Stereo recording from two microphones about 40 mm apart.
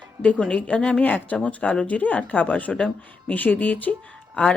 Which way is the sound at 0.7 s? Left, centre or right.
Left.